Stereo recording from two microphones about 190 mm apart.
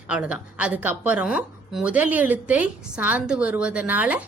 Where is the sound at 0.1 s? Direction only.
5° right (ahead or behind).